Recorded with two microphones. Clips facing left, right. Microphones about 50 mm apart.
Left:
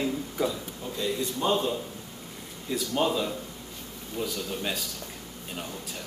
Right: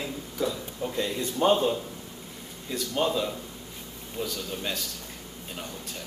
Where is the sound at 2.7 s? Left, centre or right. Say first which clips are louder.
Left 1 dB; centre.